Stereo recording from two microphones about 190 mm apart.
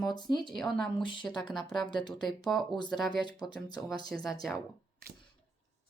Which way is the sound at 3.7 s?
Centre (ahead or behind).